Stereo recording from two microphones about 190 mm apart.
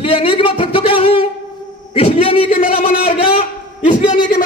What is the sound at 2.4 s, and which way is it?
Speech, 45° left (ahead or behind).